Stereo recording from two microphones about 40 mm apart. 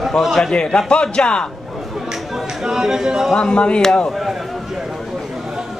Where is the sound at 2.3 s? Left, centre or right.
Centre.